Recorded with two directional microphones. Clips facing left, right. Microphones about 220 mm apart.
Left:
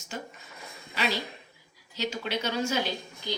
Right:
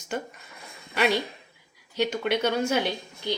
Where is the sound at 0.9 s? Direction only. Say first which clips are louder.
Right 6 dB; 60° right (ahead or behind).